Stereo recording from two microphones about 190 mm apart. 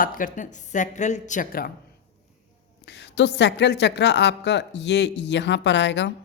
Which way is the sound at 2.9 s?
65° left (ahead or behind).